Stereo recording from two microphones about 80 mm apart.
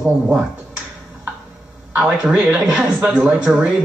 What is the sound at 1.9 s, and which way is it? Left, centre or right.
Speech, centre.